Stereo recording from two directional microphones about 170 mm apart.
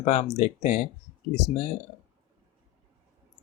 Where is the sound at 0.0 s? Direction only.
40° left (ahead or behind).